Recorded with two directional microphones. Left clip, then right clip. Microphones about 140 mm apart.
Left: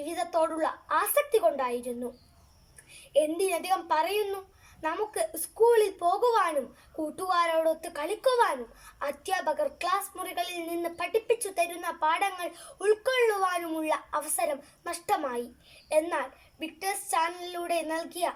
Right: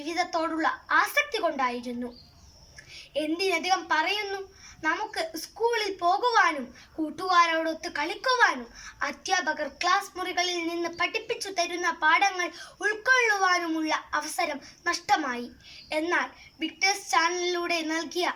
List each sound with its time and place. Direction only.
0.1 s a woman's voice: 15° left (ahead or behind)
3.1 s a woman's voice: 15° left (ahead or behind)